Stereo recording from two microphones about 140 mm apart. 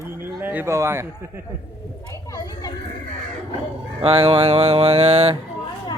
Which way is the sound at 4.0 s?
45° right (ahead or behind).